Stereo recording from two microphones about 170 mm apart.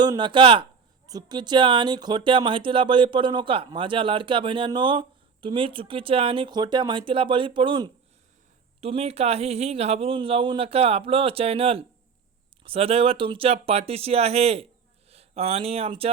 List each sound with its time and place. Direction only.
0.0 s speech: 25° right (ahead or behind)